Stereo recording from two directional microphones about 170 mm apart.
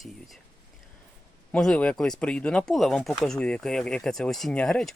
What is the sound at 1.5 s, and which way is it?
Speech, 5° left (ahead or behind).